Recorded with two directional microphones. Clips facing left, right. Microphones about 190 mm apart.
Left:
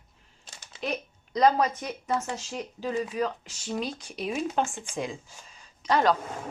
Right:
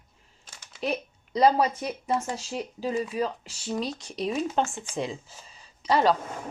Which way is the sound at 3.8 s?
Centre (ahead or behind).